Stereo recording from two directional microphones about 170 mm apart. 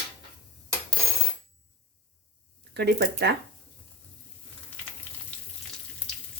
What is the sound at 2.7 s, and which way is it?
Speech, 70° right (ahead or behind).